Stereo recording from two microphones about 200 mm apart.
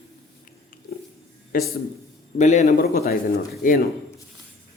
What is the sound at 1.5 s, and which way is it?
A man's voice, 45° left (ahead or behind).